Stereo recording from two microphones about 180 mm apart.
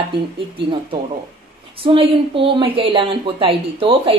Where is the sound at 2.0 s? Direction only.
30° right (ahead or behind).